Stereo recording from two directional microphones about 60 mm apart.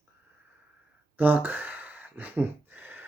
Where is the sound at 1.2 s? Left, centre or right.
Right.